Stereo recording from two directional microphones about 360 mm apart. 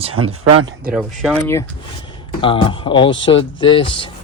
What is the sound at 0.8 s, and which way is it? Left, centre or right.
Speech, centre.